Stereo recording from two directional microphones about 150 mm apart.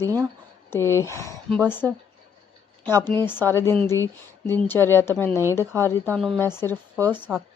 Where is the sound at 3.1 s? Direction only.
15° left (ahead or behind).